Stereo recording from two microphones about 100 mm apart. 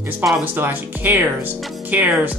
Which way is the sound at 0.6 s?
20° right (ahead or behind).